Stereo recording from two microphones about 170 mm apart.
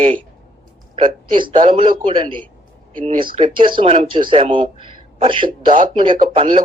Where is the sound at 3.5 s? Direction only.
30° right (ahead or behind).